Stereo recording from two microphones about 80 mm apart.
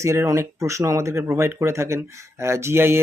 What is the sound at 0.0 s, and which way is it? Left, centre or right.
Speech, right.